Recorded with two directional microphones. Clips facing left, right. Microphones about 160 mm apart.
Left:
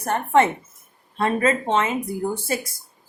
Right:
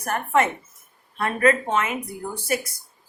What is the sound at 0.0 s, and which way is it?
Speech, 30° left (ahead or behind).